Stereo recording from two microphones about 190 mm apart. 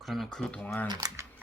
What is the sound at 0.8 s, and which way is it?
Speech, 20° right (ahead or behind).